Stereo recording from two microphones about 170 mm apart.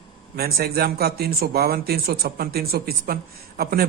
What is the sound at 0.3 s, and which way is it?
Speech, 65° right (ahead or behind).